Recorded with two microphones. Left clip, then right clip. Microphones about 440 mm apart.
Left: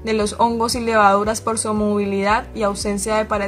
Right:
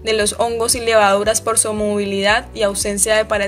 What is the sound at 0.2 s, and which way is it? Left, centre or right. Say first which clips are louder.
A woman's voice: even; centre.